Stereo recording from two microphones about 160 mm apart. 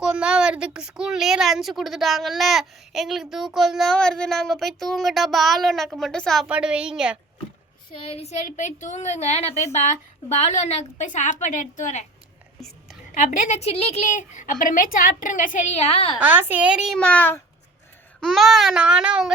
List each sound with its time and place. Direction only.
0.0 s a woman's voice: 5° right (ahead or behind)
7.9 s a woman's voice: 40° left (ahead or behind)
12.5 s whispering: centre (ahead or behind)
13.3 s a woman's voice: 45° left (ahead or behind)
16.2 s a woman's voice: 10° right (ahead or behind)
17.0 s speech: 10° left (ahead or behind)
18.2 s a woman's voice: centre (ahead or behind)